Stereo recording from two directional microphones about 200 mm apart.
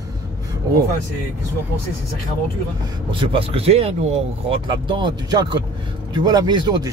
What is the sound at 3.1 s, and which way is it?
Speech, 25° right (ahead or behind).